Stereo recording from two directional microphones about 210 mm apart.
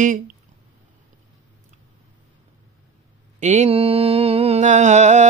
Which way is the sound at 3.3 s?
35° right (ahead or behind).